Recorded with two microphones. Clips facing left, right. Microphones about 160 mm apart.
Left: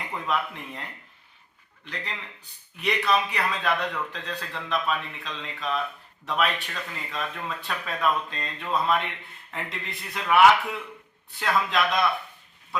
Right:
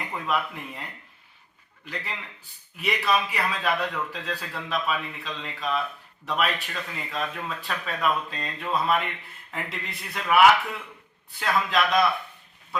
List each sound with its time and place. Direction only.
0.3 s a man's voice: 5° right (ahead or behind)
1.8 s a man's voice: 5° right (ahead or behind)